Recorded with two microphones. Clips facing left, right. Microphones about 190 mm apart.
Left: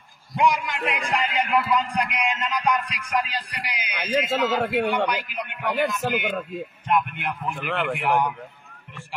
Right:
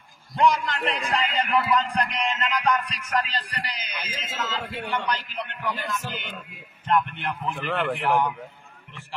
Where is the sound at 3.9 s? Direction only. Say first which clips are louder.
Left 12 dB; 70° left (ahead or behind).